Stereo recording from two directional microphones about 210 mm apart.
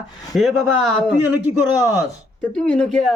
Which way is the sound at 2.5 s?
5° left (ahead or behind).